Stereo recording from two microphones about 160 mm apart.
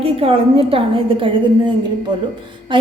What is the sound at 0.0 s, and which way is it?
A woman's voice, 35° right (ahead or behind).